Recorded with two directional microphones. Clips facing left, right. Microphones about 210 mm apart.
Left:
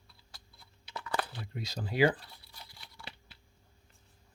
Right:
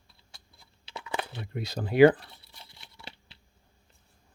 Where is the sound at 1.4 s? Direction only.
60° right (ahead or behind).